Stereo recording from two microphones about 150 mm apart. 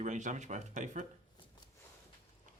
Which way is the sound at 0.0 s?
55° right (ahead or behind).